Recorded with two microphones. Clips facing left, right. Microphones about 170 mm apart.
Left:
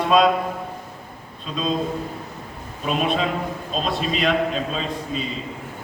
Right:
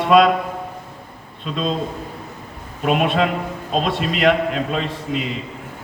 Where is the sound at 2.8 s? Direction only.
65° right (ahead or behind).